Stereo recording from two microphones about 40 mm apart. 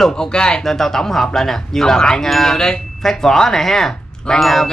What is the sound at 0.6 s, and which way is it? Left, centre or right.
Speech, centre.